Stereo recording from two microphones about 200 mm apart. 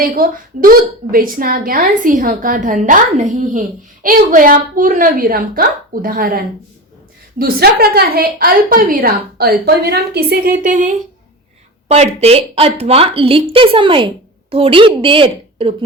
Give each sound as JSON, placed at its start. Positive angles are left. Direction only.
{"t": 0.0, "sound": "a woman's voice", "side_deg": -45}